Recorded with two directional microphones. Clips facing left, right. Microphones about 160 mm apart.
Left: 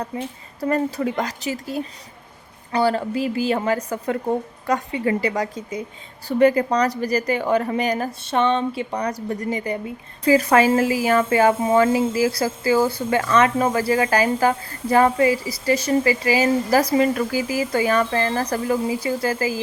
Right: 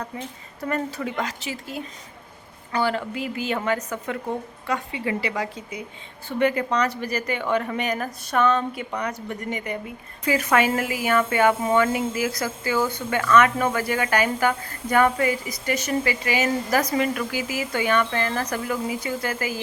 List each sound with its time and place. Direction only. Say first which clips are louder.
0.6 s a woman's voice: left 6 dB; 35° left (ahead or behind)